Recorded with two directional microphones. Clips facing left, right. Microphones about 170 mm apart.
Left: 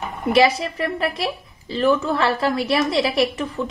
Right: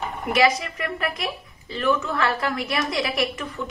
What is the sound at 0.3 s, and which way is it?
A woman's voice, 30° left (ahead or behind).